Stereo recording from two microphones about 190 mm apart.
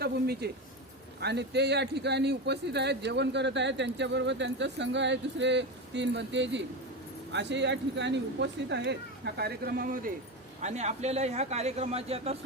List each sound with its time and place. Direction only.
0.0 s a sound: 55° right (ahead or behind)
1.2 s a man's voice: 60° right (ahead or behind)
10.6 s speech: 35° right (ahead or behind)